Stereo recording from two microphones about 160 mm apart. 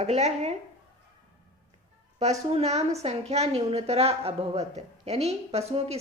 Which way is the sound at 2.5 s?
40° right (ahead or behind).